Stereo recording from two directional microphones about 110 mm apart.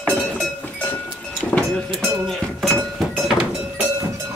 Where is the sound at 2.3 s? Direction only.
Centre (ahead or behind).